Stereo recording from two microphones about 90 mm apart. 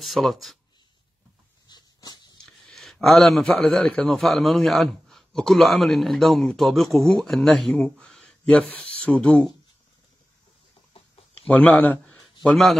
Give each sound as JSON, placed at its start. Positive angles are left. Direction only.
{"t": 0.0, "sound": "speech", "side_deg": 0}
{"t": 1.7, "sound": "dog", "side_deg": 50}
{"t": 2.4, "sound": "a man's voice", "side_deg": 0}
{"t": 11.3, "sound": "speech", "side_deg": 15}